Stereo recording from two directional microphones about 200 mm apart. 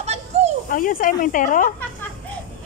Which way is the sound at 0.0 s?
30° right (ahead or behind).